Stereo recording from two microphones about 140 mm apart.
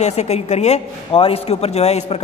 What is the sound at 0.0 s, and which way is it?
A man's voice, 50° left (ahead or behind).